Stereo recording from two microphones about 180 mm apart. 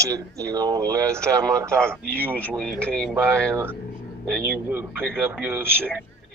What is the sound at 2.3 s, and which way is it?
Speech, 5° left (ahead or behind).